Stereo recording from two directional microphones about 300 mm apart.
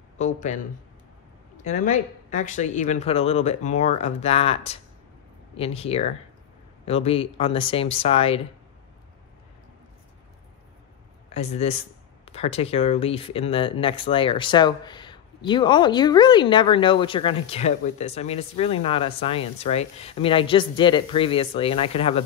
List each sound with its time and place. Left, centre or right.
0.2 s speech: left
1.6 s speech: left
11.2 s speech: left